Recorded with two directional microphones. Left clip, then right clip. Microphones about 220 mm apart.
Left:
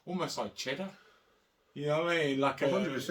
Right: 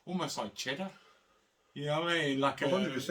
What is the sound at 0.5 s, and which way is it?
Speech, 15° right (ahead or behind).